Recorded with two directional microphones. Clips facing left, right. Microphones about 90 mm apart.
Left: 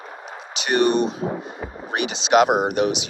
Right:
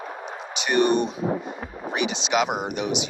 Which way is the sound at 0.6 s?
70° left (ahead or behind).